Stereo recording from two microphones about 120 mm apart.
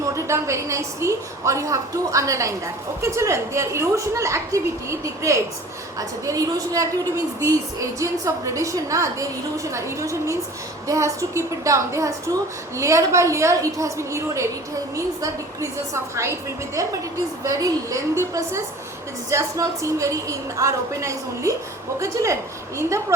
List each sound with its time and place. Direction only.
0.0 s a woman's voice: 25° right (ahead or behind)